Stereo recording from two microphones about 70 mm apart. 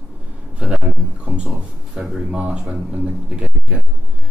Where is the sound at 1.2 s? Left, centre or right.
Centre.